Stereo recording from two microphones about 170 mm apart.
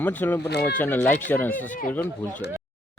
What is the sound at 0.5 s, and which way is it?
Speech, 75° left (ahead or behind).